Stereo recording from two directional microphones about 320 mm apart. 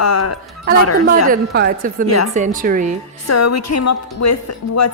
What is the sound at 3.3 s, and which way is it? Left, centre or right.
A woman's voice, left.